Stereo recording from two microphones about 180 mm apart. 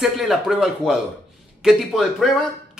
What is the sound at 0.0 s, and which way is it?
Speech, centre (ahead or behind).